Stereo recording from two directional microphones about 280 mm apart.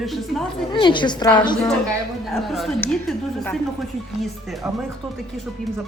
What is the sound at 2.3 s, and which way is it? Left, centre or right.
Speech, centre.